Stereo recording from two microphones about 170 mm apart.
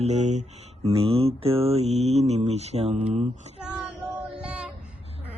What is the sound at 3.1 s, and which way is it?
Female singing, 45° right (ahead or behind).